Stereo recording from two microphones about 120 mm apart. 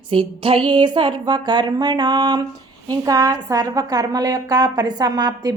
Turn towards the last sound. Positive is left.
turn(degrees=-35)  # may be behind; listen again after turning